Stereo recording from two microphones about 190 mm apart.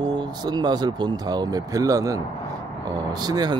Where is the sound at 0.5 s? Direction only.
20° right (ahead or behind).